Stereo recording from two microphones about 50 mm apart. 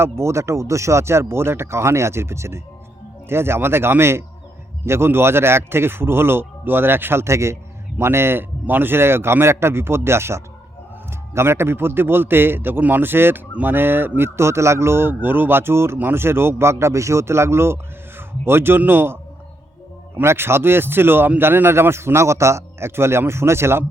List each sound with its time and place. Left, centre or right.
0.0 s speech: right
3.2 s a man's voice: right
8.6 s a man's voice: right
14.2 s a man's voice: right
20.2 s a man's voice: right